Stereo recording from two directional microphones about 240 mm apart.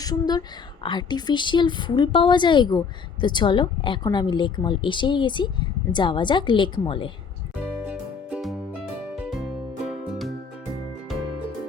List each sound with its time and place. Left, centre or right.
0.0 s a woman's voice: centre
7.9 s music: centre